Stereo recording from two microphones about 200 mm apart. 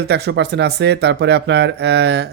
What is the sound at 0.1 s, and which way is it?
Speech, 60° right (ahead or behind).